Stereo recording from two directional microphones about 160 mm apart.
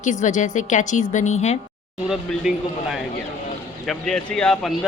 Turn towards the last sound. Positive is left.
turn(degrees=0)  # may be behind; listen again after turning